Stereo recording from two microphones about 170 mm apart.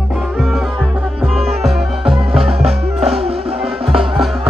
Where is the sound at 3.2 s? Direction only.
35° right (ahead or behind).